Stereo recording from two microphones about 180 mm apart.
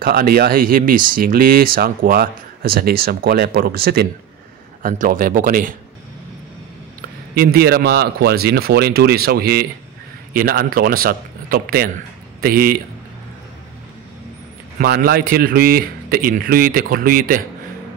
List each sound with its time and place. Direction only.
0.0 s speech: 55° right (ahead or behind)
4.8 s a man's voice: 45° right (ahead or behind)
7.3 s a man's voice: 55° right (ahead or behind)
14.8 s speech: 55° right (ahead or behind)